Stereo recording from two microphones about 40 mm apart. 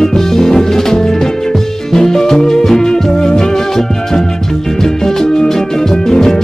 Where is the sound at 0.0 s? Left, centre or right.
Centre.